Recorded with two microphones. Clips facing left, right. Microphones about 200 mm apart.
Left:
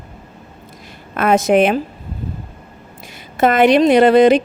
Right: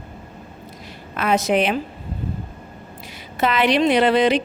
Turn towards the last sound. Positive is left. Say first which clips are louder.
# left 7 dB
turn(degrees=45)  # may be behind; listen again after turning